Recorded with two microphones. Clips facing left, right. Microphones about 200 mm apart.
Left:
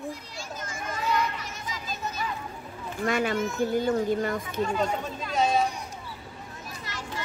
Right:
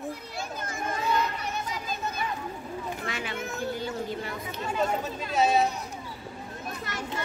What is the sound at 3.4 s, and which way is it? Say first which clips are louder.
Speech: left 7 dB; 60° right (ahead or behind).